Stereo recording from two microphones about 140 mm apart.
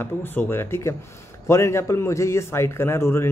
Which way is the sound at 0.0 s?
15° left (ahead or behind).